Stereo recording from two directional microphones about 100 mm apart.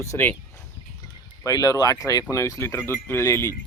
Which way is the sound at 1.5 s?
35° left (ahead or behind).